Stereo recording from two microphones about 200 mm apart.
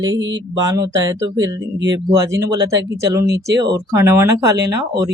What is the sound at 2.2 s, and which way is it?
Speech, 60° right (ahead or behind).